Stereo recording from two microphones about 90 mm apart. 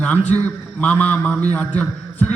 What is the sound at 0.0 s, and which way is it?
A man's voice, 15° left (ahead or behind).